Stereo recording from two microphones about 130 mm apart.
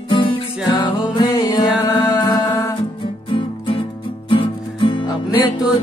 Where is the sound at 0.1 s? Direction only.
40° left (ahead or behind).